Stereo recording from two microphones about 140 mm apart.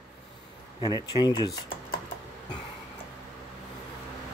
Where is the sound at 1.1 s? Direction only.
30° left (ahead or behind).